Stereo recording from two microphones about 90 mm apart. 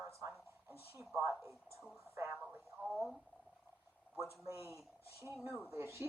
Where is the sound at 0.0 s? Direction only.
25° right (ahead or behind).